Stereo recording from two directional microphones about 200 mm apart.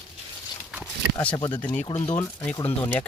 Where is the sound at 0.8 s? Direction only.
15° left (ahead or behind).